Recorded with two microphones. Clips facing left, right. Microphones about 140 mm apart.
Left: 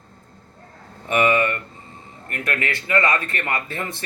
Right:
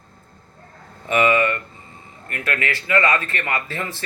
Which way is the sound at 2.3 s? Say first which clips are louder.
Right 1 dB; 25° left (ahead or behind).